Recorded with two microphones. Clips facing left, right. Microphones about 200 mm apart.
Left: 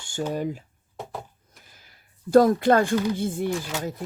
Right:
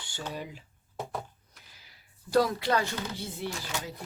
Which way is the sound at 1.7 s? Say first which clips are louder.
Left 3 dB; 50° left (ahead or behind).